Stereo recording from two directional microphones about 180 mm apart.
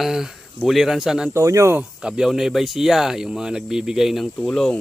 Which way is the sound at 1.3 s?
15° right (ahead or behind).